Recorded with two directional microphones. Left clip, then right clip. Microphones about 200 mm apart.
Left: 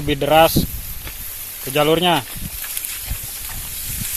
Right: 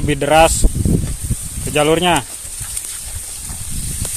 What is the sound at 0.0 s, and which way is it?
Speech, 10° right (ahead or behind).